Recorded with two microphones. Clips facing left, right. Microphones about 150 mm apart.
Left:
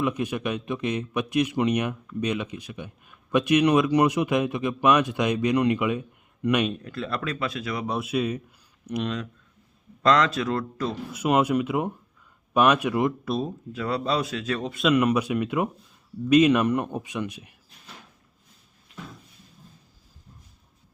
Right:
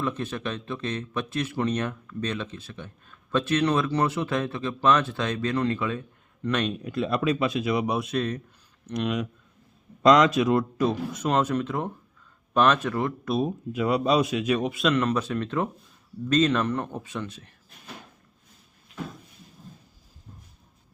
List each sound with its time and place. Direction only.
0.0 s speech: 15° left (ahead or behind)
6.8 s speech: 20° right (ahead or behind)
7.9 s speech: 5° left (ahead or behind)
9.0 s speech: 15° right (ahead or behind)
11.1 s speech: 10° left (ahead or behind)
13.4 s speech: 15° right (ahead or behind)
14.8 s speech: 10° left (ahead or behind)